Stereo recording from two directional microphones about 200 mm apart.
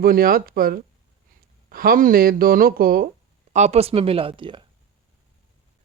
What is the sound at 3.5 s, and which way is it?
A woman's voice, 35° right (ahead or behind).